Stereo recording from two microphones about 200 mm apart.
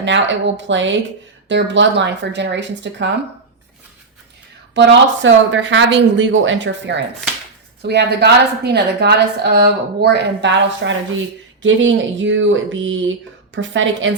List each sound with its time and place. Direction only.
0.0 s a woman's voice: 65° right (ahead or behind)
4.7 s a woman's voice: 65° right (ahead or behind)